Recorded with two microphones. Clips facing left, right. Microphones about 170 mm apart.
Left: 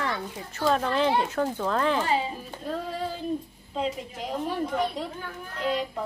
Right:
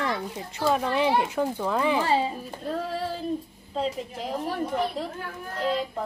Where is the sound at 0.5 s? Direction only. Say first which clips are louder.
Even; 10° right (ahead or behind).